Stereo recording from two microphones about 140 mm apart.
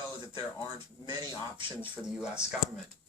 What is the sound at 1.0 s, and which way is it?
Speech, 35° right (ahead or behind).